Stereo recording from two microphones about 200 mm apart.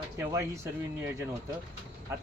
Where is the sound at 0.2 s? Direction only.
15° right (ahead or behind).